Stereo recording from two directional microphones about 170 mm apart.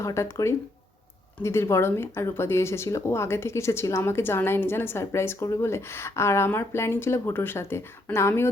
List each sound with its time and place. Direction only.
0.0 s speech: 15° left (ahead or behind)